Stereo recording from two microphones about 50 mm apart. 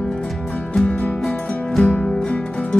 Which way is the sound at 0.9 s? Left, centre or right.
Left.